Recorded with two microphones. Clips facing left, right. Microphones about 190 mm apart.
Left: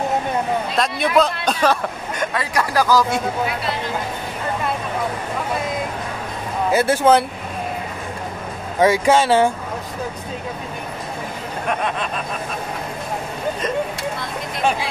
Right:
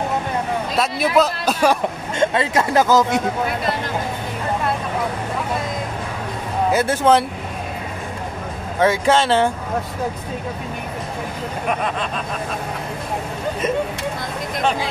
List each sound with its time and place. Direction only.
0.7 s a man's voice: 5° right (ahead or behind)
1.8 s speech: 25° right (ahead or behind)
6.7 s speech: 10° left (ahead or behind)
8.7 s speech: 10° left (ahead or behind)
11.6 s speech: centre (ahead or behind)